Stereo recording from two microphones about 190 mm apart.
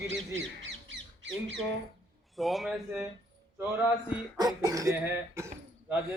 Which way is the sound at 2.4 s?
Centre (ahead or behind).